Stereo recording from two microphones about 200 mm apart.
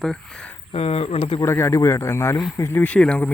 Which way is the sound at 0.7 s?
30° left (ahead or behind).